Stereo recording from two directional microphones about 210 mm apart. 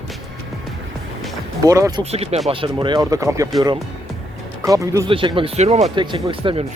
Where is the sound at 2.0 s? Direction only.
30° right (ahead or behind); by 3.5 s 15° right (ahead or behind).